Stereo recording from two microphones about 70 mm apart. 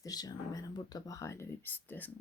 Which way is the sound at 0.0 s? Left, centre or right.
Left.